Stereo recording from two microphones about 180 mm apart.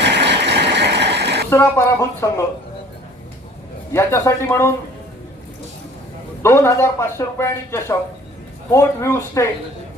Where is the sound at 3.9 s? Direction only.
15° left (ahead or behind).